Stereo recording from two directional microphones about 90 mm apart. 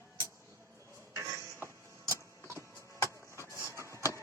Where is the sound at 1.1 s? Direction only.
30° right (ahead or behind).